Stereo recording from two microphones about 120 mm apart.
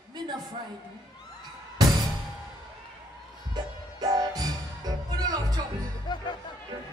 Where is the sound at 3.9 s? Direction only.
30° right (ahead or behind).